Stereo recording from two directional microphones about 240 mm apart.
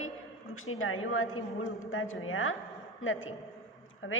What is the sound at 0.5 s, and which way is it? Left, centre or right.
A woman's voice, left.